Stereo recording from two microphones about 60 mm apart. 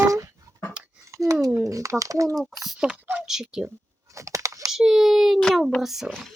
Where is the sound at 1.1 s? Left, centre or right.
Right.